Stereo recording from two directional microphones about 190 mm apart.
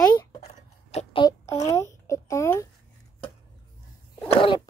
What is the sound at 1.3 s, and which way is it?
Speech, 15° left (ahead or behind).